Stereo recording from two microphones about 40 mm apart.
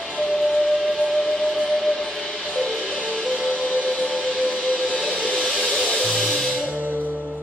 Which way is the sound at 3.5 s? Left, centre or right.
Left.